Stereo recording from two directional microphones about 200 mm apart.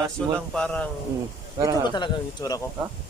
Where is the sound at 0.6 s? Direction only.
5° left (ahead or behind).